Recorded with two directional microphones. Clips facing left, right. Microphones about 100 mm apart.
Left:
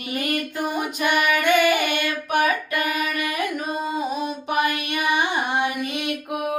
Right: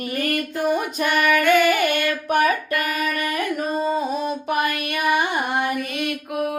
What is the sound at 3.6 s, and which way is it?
Carnatic music, 35° right (ahead or behind).